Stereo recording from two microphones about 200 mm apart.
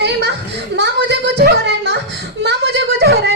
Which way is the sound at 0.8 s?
60° right (ahead or behind).